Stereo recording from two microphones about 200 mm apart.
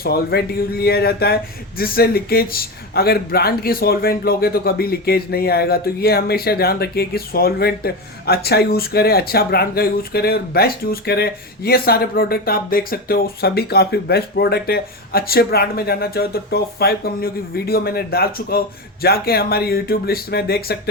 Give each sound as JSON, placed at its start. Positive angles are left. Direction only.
{"t": 0.0, "sound": "speech", "side_deg": 50}